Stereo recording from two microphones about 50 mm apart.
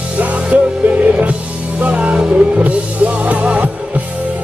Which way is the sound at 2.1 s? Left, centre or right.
Centre.